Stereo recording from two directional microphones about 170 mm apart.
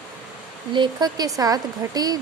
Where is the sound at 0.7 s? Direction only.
25° right (ahead or behind).